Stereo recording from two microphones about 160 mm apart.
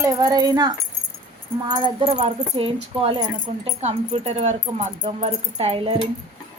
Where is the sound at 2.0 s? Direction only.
40° right (ahead or behind).